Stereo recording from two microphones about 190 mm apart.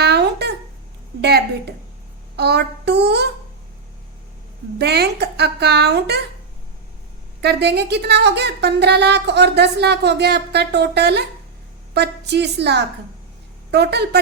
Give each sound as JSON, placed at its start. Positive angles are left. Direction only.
{"t": 0.0, "sound": "a sound", "side_deg": -60}
{"t": 1.2, "sound": "a child's voice", "side_deg": -60}
{"t": 4.8, "sound": "a woman's voice", "side_deg": -60}
{"t": 7.4, "sound": "a woman's voice", "side_deg": -60}